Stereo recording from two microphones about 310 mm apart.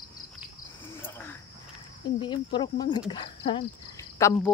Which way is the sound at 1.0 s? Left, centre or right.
Centre.